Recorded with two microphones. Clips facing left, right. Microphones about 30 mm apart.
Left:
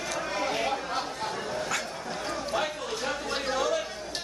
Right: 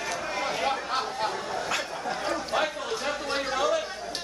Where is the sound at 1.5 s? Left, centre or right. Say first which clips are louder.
Right 1 dB; centre.